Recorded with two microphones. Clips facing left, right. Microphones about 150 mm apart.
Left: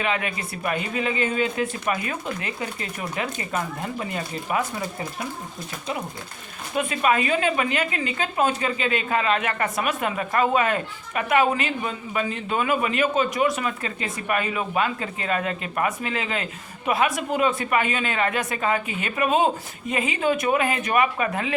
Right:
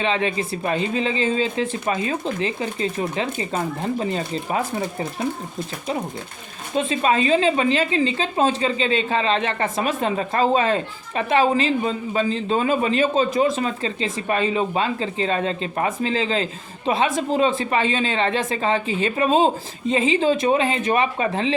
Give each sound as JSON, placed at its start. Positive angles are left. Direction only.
{"t": 0.0, "sound": "a woman's voice", "side_deg": -30}
{"t": 6.7, "sound": "a woman's voice", "side_deg": -25}